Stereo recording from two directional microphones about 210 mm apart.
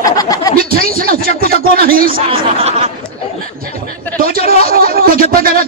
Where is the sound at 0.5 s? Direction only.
45° right (ahead or behind).